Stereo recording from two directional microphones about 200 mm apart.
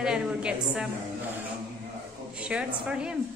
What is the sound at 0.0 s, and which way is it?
Speech, 5° right (ahead or behind).